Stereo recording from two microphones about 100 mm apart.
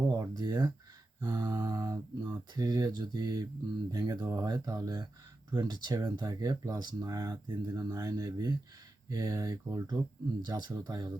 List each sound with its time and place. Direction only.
0.1 s speech: 45° right (ahead or behind)